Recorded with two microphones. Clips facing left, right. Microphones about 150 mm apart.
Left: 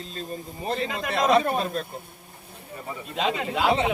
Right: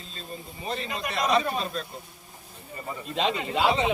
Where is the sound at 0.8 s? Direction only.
90° left.